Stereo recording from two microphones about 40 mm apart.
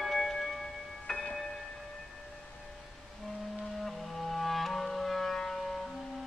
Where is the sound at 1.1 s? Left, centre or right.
Centre.